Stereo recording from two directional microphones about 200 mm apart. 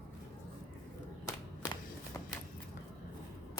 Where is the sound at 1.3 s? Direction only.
15° left (ahead or behind).